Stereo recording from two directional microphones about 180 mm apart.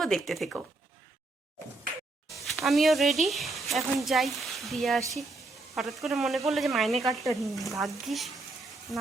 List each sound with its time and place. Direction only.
0.0 s speech: centre (ahead or behind)
2.2 s speech: centre (ahead or behind)